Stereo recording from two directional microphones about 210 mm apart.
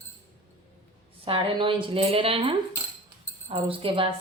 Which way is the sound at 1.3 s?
25° right (ahead or behind).